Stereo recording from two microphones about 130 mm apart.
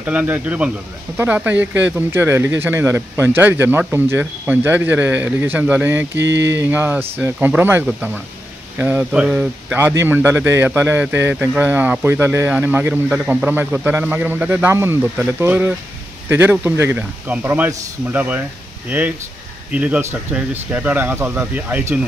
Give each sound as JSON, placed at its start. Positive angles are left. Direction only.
{"t": 0.0, "sound": "a man's voice", "side_deg": -10}